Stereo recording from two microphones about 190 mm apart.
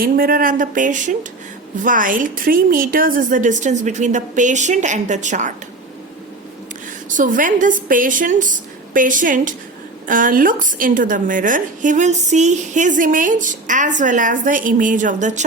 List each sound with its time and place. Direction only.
0.0 s a woman's voice: 50° right (ahead or behind)
7.1 s a woman's voice: 45° right (ahead or behind)